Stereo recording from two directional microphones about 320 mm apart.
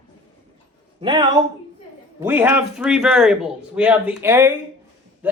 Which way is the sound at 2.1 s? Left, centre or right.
Centre.